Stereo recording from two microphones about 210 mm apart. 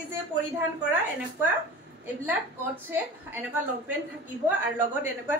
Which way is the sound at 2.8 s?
10° right (ahead or behind).